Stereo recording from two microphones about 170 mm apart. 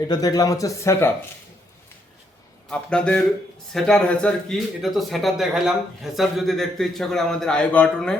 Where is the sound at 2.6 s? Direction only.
5° left (ahead or behind).